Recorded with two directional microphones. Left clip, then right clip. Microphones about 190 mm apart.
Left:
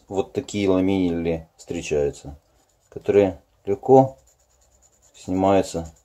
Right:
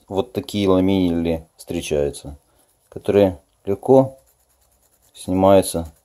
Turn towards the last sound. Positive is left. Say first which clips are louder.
# right 5 dB
turn(degrees=-35)  # may be behind; listen again after turning